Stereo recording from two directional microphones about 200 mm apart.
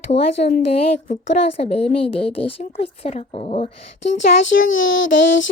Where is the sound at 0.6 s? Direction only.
30° left (ahead or behind).